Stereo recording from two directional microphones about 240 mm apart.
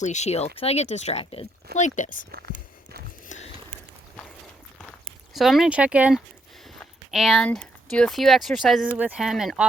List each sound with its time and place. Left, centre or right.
0.0 s speech: left
2.3 s whispering: right
3.2 s biting: left
5.3 s speech: centre